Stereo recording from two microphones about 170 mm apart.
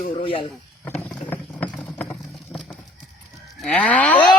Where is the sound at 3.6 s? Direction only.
5° left (ahead or behind).